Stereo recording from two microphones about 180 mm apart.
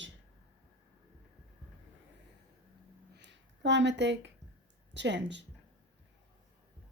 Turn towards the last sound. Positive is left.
turn(degrees=-75)  # may be behind; listen again after turning